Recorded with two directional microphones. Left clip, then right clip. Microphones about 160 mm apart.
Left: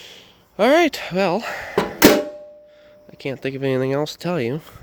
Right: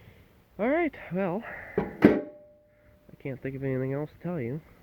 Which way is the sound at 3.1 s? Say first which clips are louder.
Left 10 dB; 30° left (ahead or behind).